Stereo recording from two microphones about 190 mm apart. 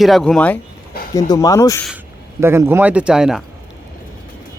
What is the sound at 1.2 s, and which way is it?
Speech, 20° left (ahead or behind).